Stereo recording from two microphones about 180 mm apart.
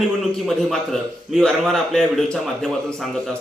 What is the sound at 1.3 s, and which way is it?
A man's voice, centre (ahead or behind).